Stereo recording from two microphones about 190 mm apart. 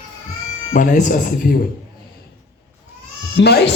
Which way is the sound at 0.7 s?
45° left (ahead or behind).